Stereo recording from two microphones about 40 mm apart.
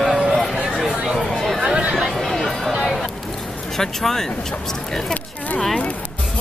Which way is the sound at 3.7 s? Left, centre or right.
Centre.